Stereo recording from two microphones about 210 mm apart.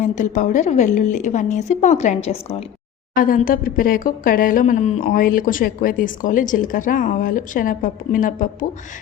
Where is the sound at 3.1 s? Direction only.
40° left (ahead or behind).